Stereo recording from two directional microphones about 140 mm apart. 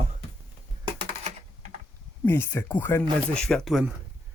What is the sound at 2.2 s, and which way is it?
Speech, 15° left (ahead or behind).